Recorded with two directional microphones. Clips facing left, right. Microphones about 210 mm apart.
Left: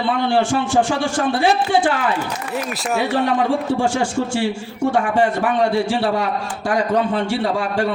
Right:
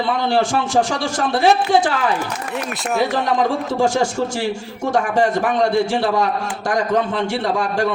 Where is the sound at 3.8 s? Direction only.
40° right (ahead or behind).